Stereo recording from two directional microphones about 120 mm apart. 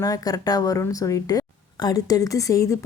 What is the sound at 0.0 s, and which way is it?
A woman's voice, 30° left (ahead or behind).